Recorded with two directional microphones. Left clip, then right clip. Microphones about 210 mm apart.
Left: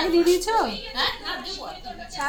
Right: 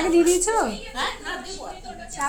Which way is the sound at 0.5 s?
30° right (ahead or behind).